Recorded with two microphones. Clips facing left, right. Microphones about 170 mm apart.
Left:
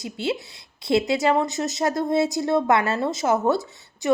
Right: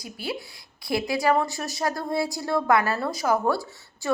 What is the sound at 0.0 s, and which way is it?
A woman's voice, 25° left (ahead or behind).